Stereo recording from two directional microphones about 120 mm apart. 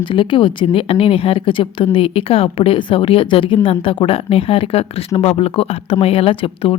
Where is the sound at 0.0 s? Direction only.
45° left (ahead or behind).